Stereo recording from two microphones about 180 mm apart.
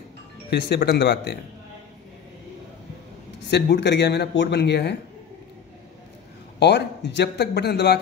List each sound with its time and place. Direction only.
0.5 s speech: 65° left (ahead or behind)
3.4 s speech: 70° left (ahead or behind)
6.6 s speech: 70° left (ahead or behind)